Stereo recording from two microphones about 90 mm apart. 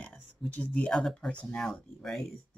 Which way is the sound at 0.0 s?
15° left (ahead or behind).